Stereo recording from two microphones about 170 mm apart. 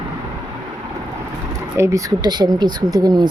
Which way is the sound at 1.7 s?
15° right (ahead or behind).